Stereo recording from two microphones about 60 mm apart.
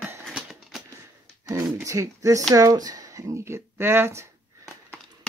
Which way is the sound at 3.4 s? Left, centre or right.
Right.